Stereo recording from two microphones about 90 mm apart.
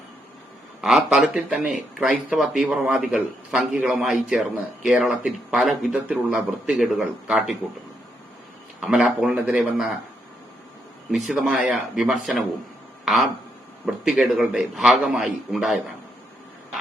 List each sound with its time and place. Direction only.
0.8 s speech: 5° right (ahead or behind)
1.3 s a man's voice: 15° right (ahead or behind)
1.5 s speech: 5° right (ahead or behind)
2.0 s a man's voice: 15° right (ahead or behind)
2.4 s speech: centre (ahead or behind)
2.8 s a man's voice: 15° right (ahead or behind)
5.9 s a man's voice: 15° right (ahead or behind)
8.9 s a man's voice: 10° right (ahead or behind)
11.1 s a man's voice: 5° right (ahead or behind)